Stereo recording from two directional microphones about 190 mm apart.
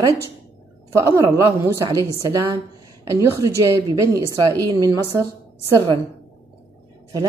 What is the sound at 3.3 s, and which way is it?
A woman's voice, 15° right (ahead or behind).